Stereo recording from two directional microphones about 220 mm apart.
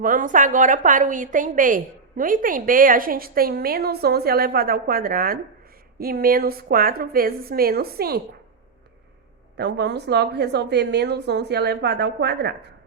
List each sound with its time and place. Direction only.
0.0 s a woman's voice: 40° right (ahead or behind)
9.6 s a woman's voice: 50° right (ahead or behind)